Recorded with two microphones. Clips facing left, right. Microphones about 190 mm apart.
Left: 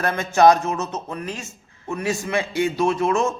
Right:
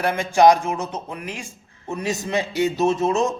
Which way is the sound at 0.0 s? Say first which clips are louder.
Even; 15° right (ahead or behind).